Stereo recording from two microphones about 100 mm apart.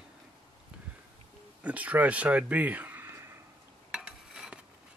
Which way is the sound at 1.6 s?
15° right (ahead or behind).